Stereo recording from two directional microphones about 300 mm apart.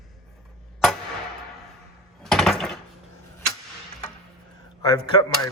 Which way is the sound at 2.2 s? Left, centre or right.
Centre.